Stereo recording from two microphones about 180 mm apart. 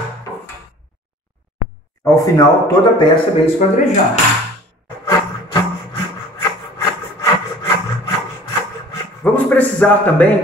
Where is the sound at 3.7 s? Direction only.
40° left (ahead or behind).